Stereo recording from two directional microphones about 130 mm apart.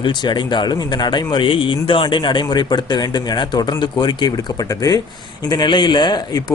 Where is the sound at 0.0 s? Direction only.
35° left (ahead or behind).